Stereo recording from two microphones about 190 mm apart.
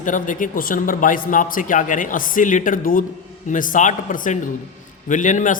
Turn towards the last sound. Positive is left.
turn(degrees=40)  # may be behind; listen again after turning